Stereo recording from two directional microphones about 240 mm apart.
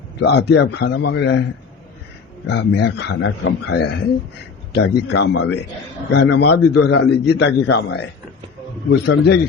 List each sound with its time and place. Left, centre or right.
0.2 s a man's voice: left
2.5 s a man's voice: left